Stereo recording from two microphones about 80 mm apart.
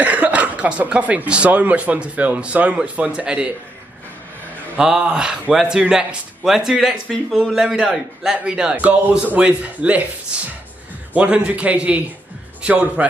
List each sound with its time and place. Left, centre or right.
0.0 s speech: centre
4.7 s speech: centre